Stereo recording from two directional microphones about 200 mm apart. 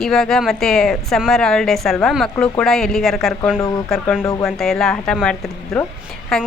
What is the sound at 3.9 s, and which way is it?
Speech, centre (ahead or behind).